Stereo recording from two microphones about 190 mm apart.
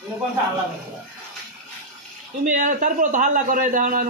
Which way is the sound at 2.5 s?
45° right (ahead or behind).